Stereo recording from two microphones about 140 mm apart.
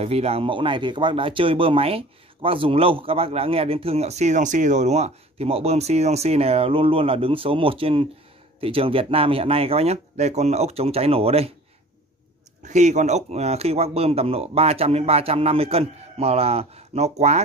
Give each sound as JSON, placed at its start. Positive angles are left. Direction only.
{"t": 0.0, "sound": "speech", "side_deg": -45}
{"t": 12.6, "sound": "speech", "side_deg": -55}